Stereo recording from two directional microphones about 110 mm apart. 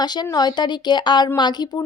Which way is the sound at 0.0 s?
40° left (ahead or behind).